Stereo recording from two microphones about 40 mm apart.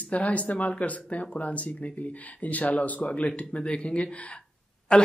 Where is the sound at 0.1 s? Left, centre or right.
Left.